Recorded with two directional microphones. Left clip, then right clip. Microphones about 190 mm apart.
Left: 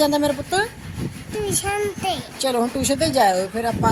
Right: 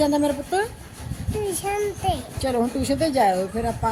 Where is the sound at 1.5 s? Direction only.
10° right (ahead or behind).